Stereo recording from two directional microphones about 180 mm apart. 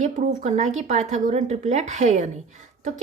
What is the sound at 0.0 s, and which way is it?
Speech, 40° right (ahead or behind).